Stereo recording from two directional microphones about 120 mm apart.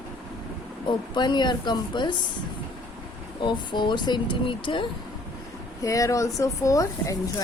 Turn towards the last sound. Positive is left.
turn(degrees=25)  # may be behind; listen again after turning